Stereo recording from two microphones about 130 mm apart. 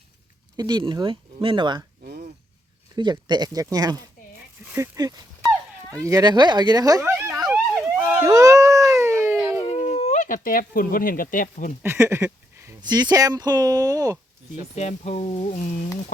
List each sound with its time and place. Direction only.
0.5 s speech: 30° right (ahead or behind)
2.9 s speech: 35° right (ahead or behind)
7.0 s a sound: 20° right (ahead or behind)
7.3 s a sound: centre (ahead or behind)
7.8 s police car: 10° right (ahead or behind)
8.2 s dog: 25° right (ahead or behind)
9.6 s speech: 60° left (ahead or behind); by 11.7 s 90° left
11.8 s a sound: 20° right (ahead or behind)
12.8 s speech: 30° right (ahead or behind)
14.8 s speech: 60° left (ahead or behind)